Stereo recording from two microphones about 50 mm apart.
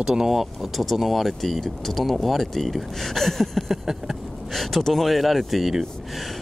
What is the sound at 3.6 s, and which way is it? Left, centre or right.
Speech, centre.